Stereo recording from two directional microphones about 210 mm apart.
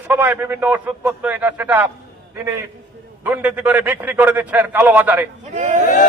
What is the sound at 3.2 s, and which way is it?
A man's voice, 5° right (ahead or behind).